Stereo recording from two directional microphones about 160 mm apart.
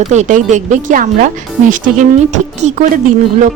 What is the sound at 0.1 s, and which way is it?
Speech, 50° right (ahead or behind).